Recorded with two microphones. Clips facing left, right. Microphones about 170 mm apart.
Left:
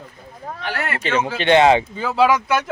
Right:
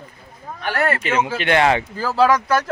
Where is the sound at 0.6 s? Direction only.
45° right (ahead or behind).